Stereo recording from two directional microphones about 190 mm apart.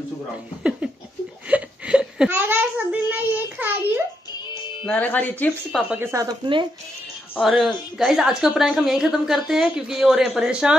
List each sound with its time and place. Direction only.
1.5 s a sound: 5° right (ahead or behind)
4.8 s speech: 10° left (ahead or behind)
5.9 s speech: 20° right (ahead or behind)
7.3 s a woman's voice: centre (ahead or behind)